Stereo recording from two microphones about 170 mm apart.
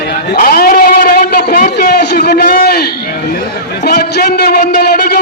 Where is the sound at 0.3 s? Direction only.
60° left (ahead or behind).